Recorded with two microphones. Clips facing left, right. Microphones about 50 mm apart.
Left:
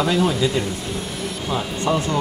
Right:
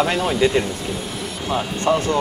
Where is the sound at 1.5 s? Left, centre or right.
Right.